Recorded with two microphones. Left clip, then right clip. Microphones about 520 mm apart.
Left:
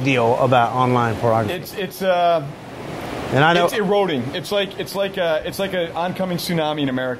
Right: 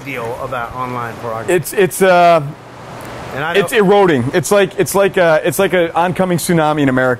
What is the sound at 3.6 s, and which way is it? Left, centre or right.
Speech, right.